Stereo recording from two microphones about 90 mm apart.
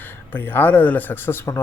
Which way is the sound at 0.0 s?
20° left (ahead or behind).